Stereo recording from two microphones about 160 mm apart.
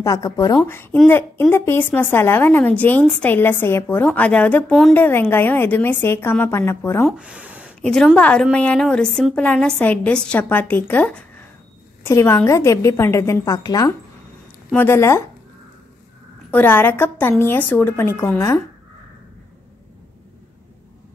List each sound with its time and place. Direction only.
0.0 s a woman's voice: 20° left (ahead or behind)
7.1 s speech: 5° right (ahead or behind)
7.8 s a woman's voice: 5° left (ahead or behind)
16.4 s a woman's voice: 10° left (ahead or behind)